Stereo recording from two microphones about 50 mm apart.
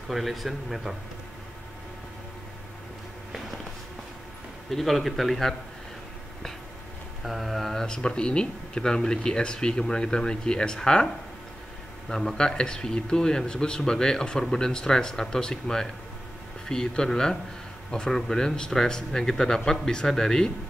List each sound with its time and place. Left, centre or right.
0.1 s a man's voice: centre
4.6 s a man's voice: centre
7.2 s speech: centre
12.1 s speech: centre